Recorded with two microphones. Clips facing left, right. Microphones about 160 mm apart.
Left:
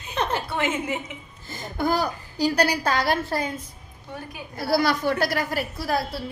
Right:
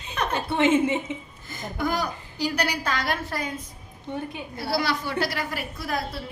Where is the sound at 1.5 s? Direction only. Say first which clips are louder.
Left 3 dB; 30° left (ahead or behind).